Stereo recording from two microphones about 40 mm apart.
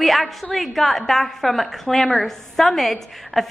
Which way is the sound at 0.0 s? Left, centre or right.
Centre.